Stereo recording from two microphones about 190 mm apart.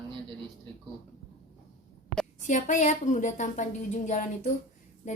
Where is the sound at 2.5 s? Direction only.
40° left (ahead or behind).